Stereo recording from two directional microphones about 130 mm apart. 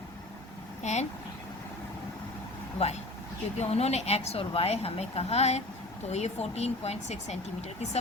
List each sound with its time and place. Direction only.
0.8 s speech: 60° left (ahead or behind)
2.7 s a woman's voice: 55° left (ahead or behind)